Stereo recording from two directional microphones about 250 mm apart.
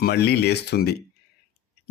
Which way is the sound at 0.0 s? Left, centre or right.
Left.